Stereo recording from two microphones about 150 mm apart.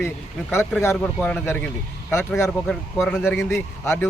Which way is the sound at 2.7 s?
5° left (ahead or behind).